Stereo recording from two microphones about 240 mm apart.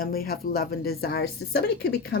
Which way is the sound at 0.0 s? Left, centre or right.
Left.